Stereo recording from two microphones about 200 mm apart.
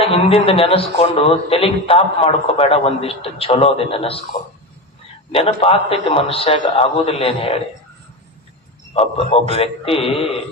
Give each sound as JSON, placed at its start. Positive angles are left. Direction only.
{"t": 0.0, "sound": "a man's voice", "side_deg": 30}
{"t": 5.3, "sound": "a man's voice", "side_deg": 30}
{"t": 8.9, "sound": "a man's voice", "side_deg": 30}